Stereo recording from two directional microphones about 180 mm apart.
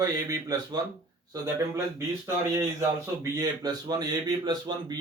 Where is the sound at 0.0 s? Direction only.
20° right (ahead or behind).